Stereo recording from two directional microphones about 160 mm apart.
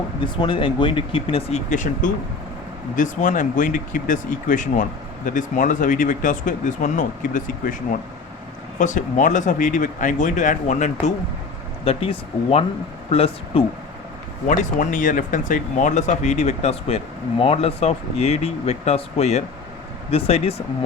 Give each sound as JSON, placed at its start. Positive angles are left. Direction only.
{"t": 0.4, "sound": "speech", "side_deg": 30}
{"t": 8.8, "sound": "speech", "side_deg": 50}
{"t": 11.9, "sound": "speech", "side_deg": 35}
{"t": 14.4, "sound": "speech", "side_deg": 55}